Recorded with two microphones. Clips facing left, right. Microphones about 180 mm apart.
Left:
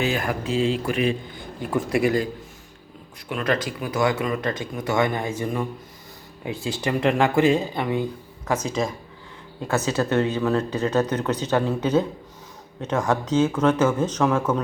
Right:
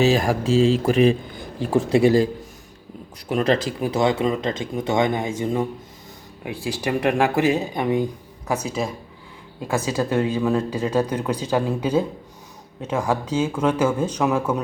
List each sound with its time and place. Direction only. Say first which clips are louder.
0.0 s speech: right 6 dB; 30° right (ahead or behind); by 14.6 s 10° right (ahead or behind)